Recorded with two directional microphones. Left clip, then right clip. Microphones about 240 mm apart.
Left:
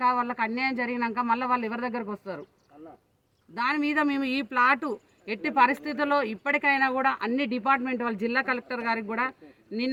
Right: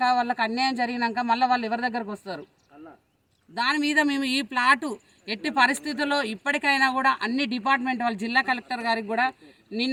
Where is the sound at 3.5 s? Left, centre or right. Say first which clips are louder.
Right 3 dB; centre.